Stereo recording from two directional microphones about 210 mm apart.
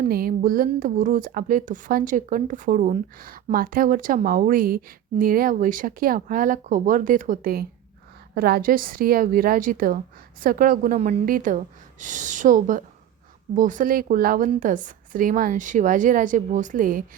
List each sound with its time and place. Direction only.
0.0 s a woman's voice: 45° right (ahead or behind)